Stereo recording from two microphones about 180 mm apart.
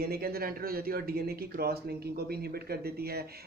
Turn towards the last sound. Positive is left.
turn(degrees=-60)  # may be behind; listen again after turning